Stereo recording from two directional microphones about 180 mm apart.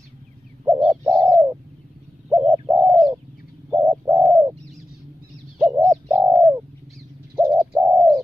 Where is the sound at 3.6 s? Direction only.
15° right (ahead or behind).